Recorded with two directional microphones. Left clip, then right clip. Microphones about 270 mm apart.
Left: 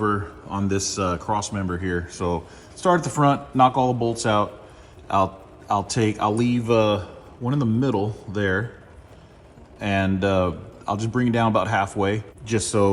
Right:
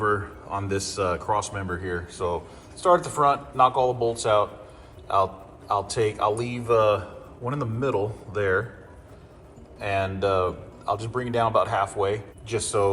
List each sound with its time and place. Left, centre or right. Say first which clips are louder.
0.5 s speech: left 2 dB; left
9.8 s speech: left 2 dB; left